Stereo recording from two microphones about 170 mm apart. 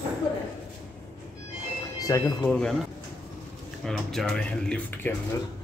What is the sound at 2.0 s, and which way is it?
Speech, 20° left (ahead or behind).